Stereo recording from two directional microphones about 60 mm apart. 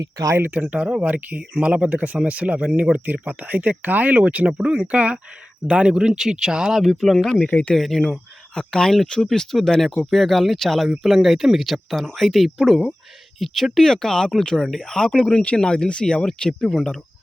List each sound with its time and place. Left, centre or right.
0.0 s speech: right
0.5 s speech: right; by 7.4 s centre
7.4 s speech: centre
7.8 s speech: centre